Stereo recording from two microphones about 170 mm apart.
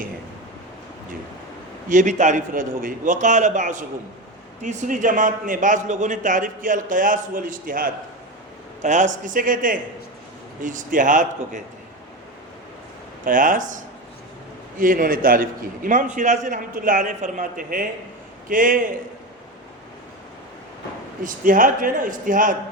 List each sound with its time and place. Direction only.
1.9 s a man's voice: 50° right (ahead or behind)
13.2 s a man's voice: 50° right (ahead or behind)
21.2 s a man's voice: 55° right (ahead or behind)